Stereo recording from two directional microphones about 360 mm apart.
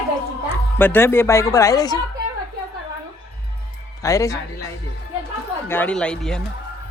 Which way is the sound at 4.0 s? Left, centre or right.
Centre.